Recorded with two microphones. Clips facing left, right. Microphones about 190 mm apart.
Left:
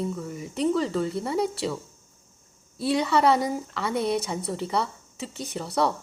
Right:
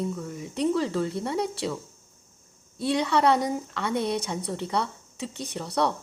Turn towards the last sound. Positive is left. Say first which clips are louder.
# left 1 dB
turn(degrees=0)  # may be behind; listen again after turning